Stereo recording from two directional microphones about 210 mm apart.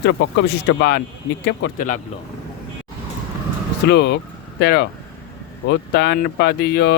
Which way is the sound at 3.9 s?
55° left (ahead or behind).